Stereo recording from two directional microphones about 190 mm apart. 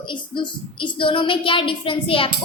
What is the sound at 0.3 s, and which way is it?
A woman's voice, 25° left (ahead or behind).